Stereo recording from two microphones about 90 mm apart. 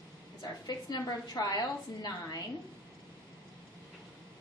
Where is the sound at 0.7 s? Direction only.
45° left (ahead or behind).